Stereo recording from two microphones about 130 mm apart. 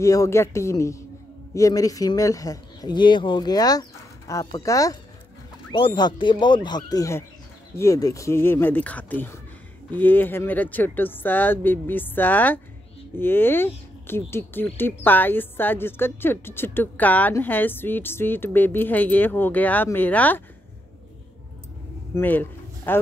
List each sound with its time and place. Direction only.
0.0 s speech: 25° left (ahead or behind)
5.7 s a woman's voice: 40° left (ahead or behind); by 20.4 s 15° left (ahead or behind)
22.1 s a sound: 15° left (ahead or behind)